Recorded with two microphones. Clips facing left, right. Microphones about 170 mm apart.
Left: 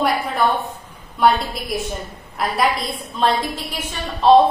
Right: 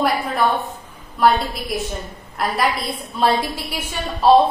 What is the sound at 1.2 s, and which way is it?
A woman's voice, centre (ahead or behind).